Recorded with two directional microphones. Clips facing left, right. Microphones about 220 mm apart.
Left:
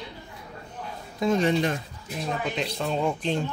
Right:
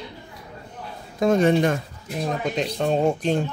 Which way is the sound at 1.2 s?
55° right (ahead or behind).